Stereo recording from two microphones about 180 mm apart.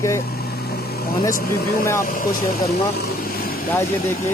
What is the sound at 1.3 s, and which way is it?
Speech, 55° left (ahead or behind).